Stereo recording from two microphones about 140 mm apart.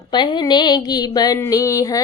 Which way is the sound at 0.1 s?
30° left (ahead or behind).